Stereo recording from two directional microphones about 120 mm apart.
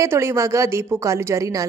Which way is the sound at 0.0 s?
25° right (ahead or behind).